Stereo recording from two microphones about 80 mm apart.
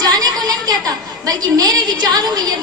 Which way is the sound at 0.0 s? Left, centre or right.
Right.